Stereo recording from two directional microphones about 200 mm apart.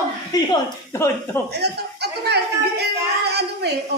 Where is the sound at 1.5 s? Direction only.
55° right (ahead or behind).